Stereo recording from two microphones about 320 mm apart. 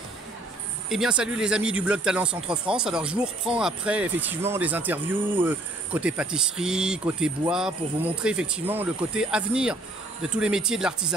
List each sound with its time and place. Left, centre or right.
0.8 s speech: centre